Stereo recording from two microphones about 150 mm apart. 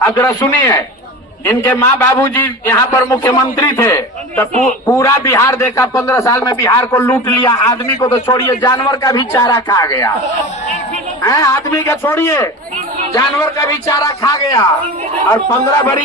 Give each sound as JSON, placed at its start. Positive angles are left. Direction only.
{"t": 0.0, "sound": "a man's voice", "side_deg": 20}
{"t": 11.2, "sound": "a man's voice", "side_deg": 20}